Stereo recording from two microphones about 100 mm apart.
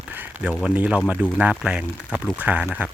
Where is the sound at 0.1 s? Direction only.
20° right (ahead or behind).